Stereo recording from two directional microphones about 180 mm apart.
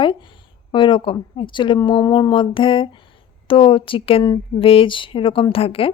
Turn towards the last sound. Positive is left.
turn(degrees=30)  # may be behind; listen again after turning